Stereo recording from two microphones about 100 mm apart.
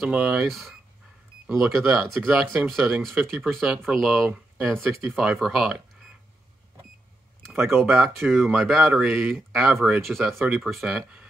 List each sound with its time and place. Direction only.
0.1 s speech: 10° right (ahead or behind)
7.5 s speech: 20° right (ahead or behind)
7.8 s speech: centre (ahead or behind)